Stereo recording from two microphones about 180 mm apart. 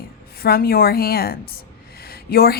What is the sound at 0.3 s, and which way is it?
A woman's voice, 55° left (ahead or behind).